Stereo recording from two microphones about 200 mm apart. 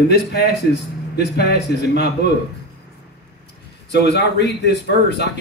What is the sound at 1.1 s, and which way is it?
Speech, 55° left (ahead or behind).